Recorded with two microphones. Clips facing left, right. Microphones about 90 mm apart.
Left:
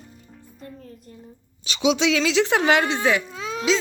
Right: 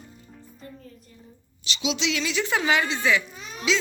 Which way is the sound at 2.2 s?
90° left.